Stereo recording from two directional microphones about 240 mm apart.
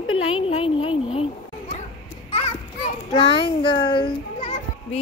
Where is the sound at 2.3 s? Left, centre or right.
Left.